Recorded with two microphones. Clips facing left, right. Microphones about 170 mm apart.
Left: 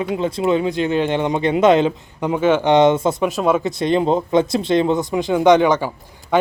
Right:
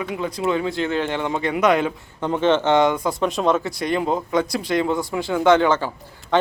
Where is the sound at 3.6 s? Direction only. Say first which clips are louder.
Left 5 dB; 25° left (ahead or behind).